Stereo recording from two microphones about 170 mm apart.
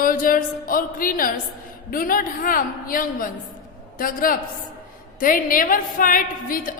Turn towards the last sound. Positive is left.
turn(degrees=55)  # may be behind; listen again after turning